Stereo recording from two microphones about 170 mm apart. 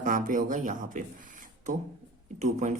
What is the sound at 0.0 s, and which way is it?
Speech, 50° right (ahead or behind).